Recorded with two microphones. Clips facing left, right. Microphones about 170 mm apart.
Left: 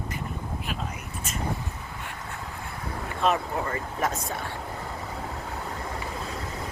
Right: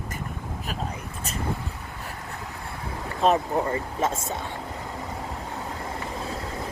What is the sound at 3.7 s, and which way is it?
Speech, 25° right (ahead or behind).